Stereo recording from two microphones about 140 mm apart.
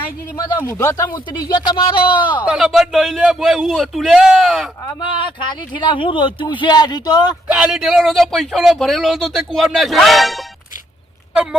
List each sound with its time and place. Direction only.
0.7 s speech: 20° left (ahead or behind)
1.5 s speech: 35° left (ahead or behind)
2.4 s speech: 5° right (ahead or behind)
4.9 s speech: 35° left (ahead or behind)
7.4 s speech: 5° right (ahead or behind)